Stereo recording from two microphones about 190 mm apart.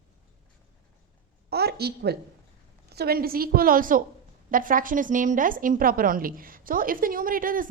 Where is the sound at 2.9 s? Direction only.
55° right (ahead or behind).